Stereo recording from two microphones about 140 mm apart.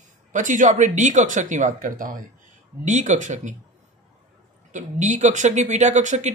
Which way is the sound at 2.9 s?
60° right (ahead or behind).